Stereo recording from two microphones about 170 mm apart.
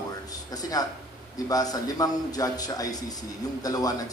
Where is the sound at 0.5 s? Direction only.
20° left (ahead or behind).